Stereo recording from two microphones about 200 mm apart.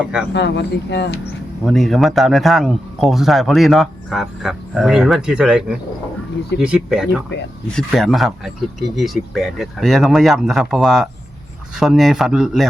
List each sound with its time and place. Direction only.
0.0 s a man's voice: 5° right (ahead or behind)
0.3 s speech: 60° left (ahead or behind)
1.6 s a man's voice: centre (ahead or behind)